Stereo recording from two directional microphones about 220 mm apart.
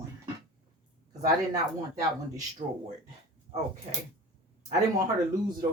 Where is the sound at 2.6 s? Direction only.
35° right (ahead or behind).